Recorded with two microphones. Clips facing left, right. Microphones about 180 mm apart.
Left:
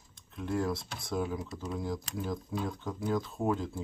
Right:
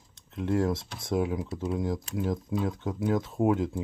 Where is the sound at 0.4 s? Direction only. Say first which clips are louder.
Right 5 dB; 20° right (ahead or behind).